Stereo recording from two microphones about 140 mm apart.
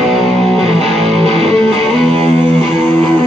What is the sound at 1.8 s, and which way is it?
Music, 5° left (ahead or behind).